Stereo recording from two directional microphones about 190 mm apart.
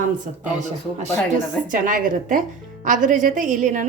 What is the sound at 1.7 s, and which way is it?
A woman's voice, 45° right (ahead or behind).